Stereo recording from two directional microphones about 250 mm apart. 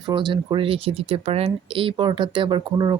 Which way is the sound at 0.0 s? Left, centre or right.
Centre.